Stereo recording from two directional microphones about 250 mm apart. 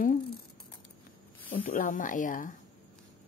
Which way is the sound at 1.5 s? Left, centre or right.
Left.